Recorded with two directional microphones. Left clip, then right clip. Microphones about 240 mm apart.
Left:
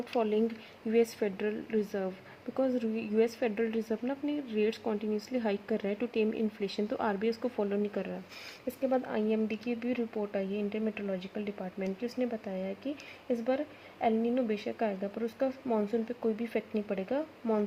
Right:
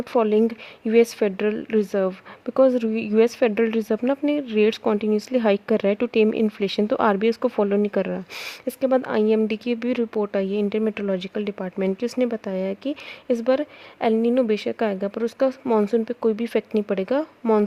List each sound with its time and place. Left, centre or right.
0.0 s speech: right